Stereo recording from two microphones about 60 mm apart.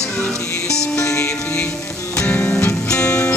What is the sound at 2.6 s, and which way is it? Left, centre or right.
Music, left.